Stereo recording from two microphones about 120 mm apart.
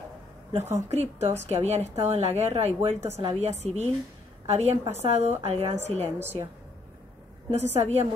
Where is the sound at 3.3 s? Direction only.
65° right (ahead or behind).